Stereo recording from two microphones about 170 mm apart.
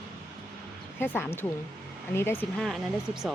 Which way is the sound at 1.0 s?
10° left (ahead or behind).